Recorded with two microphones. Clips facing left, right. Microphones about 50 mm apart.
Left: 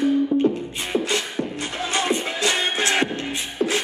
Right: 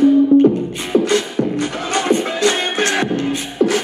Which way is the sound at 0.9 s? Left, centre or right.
Right.